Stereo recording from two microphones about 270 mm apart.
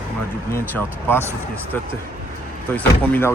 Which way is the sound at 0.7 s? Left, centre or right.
Centre.